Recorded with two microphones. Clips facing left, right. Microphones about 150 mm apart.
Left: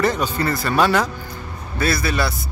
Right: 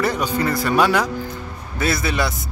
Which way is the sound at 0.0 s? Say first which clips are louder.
Even; 10° right (ahead or behind).